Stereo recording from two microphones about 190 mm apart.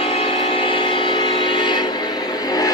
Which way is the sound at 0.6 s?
25° left (ahead or behind).